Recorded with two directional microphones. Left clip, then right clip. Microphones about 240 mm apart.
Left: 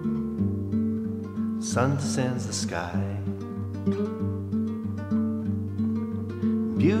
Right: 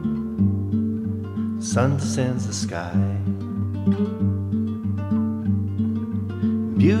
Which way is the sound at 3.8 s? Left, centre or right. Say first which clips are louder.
Right 3 dB; right.